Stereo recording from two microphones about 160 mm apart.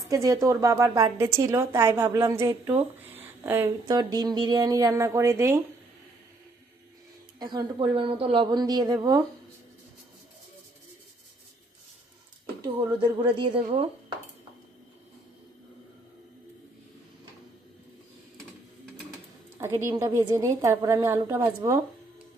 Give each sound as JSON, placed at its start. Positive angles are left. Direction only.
{"t": 0.1, "sound": "a woman's voice", "side_deg": -20}
{"t": 3.8, "sound": "a woman's voice", "side_deg": -25}
{"t": 7.3, "sound": "a woman's voice", "side_deg": -25}
{"t": 12.6, "sound": "speech", "side_deg": -30}
{"t": 19.5, "sound": "a woman's voice", "side_deg": -20}